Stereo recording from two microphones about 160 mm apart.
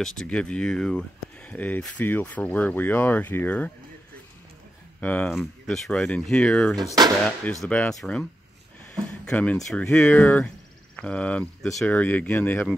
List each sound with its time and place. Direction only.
0.0 s speech: 5° left (ahead or behind)
5.0 s speech: 10° left (ahead or behind)
6.8 s speech: 25° right (ahead or behind)
7.6 s speech: 5° left (ahead or behind)